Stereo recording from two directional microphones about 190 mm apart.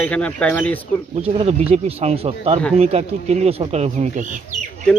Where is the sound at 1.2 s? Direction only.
30° right (ahead or behind).